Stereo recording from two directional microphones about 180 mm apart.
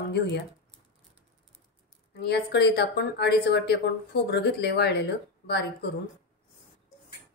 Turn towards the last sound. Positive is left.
turn(degrees=65)  # may be behind; listen again after turning